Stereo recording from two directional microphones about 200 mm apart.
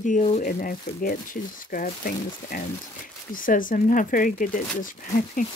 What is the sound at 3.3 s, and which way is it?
Speech, 45° left (ahead or behind).